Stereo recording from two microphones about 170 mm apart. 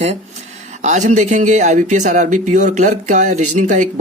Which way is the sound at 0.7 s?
45° right (ahead or behind).